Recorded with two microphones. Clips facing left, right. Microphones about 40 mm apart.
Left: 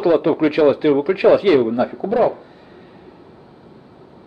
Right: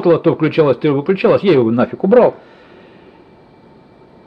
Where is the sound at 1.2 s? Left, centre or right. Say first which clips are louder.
Even; right.